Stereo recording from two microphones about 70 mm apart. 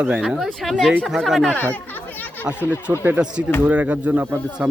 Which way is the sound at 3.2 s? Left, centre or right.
Centre.